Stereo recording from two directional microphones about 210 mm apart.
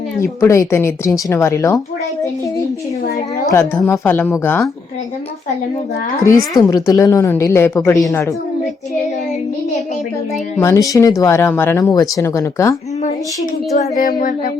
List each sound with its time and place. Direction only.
0.2 s a woman's voice: 15° left (ahead or behind)
3.5 s a woman's voice: 15° left (ahead or behind)
6.5 s a woman's voice: 20° left (ahead or behind)
10.6 s a woman's voice: 15° left (ahead or behind)
13.7 s a sound: 40° left (ahead or behind)